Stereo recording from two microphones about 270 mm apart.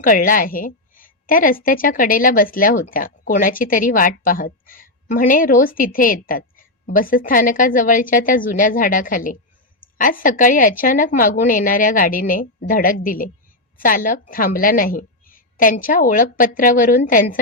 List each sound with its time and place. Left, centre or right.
0.0 s a woman's voice: left